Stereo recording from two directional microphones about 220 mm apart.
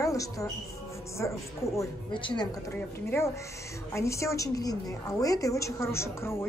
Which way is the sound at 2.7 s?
10° left (ahead or behind).